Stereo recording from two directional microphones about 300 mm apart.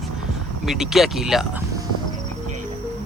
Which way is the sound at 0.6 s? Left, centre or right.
Centre.